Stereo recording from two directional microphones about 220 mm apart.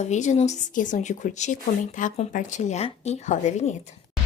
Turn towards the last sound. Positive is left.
turn(degrees=30)  # may be behind; listen again after turning